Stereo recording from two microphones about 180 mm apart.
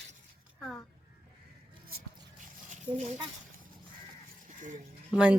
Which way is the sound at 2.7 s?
40° right (ahead or behind).